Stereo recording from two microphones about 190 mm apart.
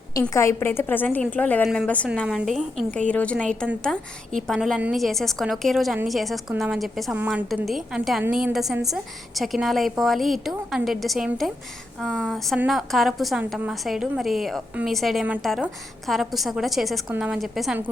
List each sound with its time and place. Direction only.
0.1 s a woman's voice: 15° left (ahead or behind); by 17.8 s 5° right (ahead or behind)